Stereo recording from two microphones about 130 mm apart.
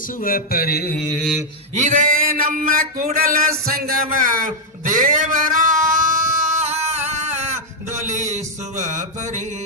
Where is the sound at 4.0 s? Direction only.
90° right.